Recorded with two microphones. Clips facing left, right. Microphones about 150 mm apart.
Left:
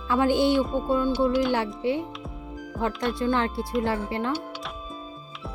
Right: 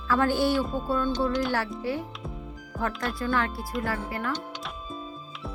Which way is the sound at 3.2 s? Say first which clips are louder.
Left 2 dB; 25° left (ahead or behind).